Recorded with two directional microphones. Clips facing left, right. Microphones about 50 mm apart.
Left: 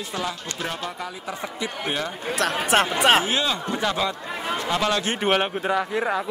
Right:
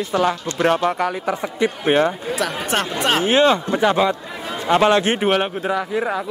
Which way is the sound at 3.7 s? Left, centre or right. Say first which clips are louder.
Right 8 dB; right.